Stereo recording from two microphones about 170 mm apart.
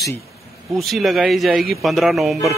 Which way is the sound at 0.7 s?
Centre (ahead or behind).